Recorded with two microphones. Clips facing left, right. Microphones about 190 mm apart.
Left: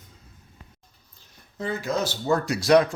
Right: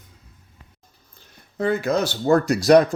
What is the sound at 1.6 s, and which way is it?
Speech, 60° right (ahead or behind).